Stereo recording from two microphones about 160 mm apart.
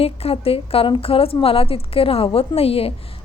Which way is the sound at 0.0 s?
40° left (ahead or behind).